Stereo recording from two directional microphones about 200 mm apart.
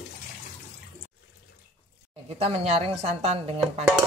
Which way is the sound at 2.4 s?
30° right (ahead or behind).